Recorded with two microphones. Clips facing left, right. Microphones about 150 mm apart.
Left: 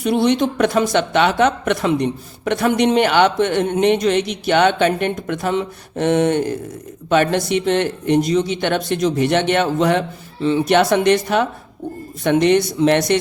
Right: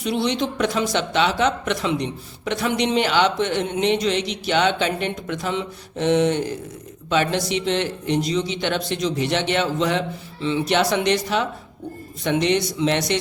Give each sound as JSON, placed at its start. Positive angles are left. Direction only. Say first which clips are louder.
{"t": 0.0, "sound": "a woman's voice", "louder": "left 6 dB", "side_deg": 50}